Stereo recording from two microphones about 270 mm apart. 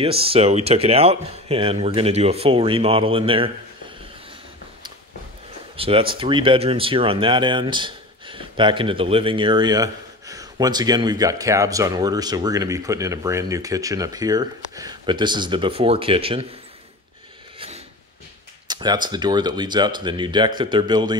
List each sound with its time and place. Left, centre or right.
0.0 s speech: right
5.8 s speech: centre
17.6 s a sound: right
19.0 s speech: centre